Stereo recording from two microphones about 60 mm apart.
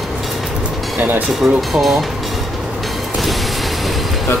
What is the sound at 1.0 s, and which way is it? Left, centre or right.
Speech, right.